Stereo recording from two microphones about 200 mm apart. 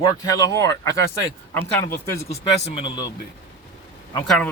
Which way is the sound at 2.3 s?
30° left (ahead or behind).